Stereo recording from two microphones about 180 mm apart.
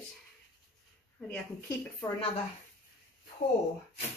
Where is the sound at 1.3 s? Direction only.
15° left (ahead or behind).